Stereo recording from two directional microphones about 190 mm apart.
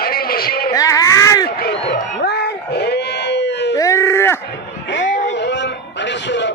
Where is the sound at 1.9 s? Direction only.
55° left (ahead or behind).